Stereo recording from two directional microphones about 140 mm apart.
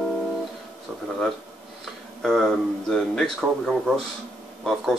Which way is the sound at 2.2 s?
5° left (ahead or behind).